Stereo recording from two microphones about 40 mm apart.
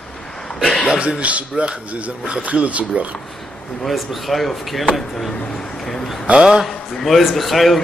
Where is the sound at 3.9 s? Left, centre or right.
Centre.